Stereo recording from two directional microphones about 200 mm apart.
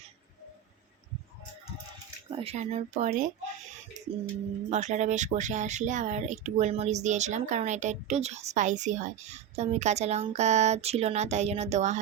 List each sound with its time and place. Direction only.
2.3 s speech: 30° right (ahead or behind)
4.0 s music: 35° right (ahead or behind)
4.7 s speech: 35° right (ahead or behind)